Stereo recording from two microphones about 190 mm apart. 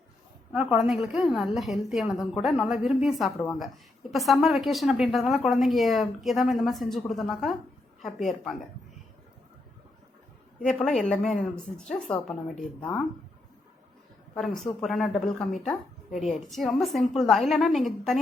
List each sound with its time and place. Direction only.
0.5 s a woman's voice: 5° right (ahead or behind)
10.6 s a woman's voice: 5° left (ahead or behind)
14.3 s a woman's voice: centre (ahead or behind)